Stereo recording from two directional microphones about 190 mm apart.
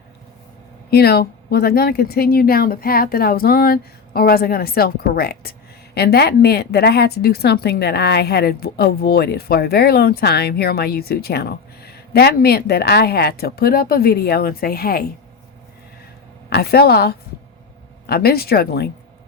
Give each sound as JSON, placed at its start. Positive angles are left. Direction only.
{"t": 0.9, "sound": "speech", "side_deg": 60}
{"t": 16.5, "sound": "speech", "side_deg": 55}